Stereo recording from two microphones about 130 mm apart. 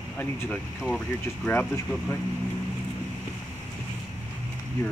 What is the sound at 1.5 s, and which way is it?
Speech, 20° left (ahead or behind).